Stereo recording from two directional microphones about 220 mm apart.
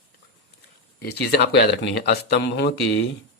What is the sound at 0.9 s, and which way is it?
Speech, 50° left (ahead or behind).